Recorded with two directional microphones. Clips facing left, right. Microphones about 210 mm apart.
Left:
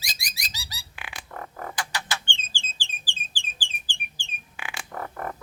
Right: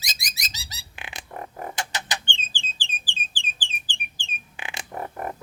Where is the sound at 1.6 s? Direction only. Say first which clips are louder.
Even; 20° right (ahead or behind).